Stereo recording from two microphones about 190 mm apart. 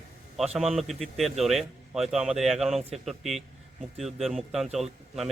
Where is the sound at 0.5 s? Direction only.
Centre (ahead or behind).